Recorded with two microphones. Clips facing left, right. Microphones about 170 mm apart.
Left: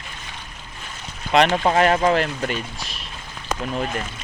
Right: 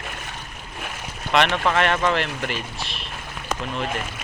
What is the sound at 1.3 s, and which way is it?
Speech, 35° left (ahead or behind).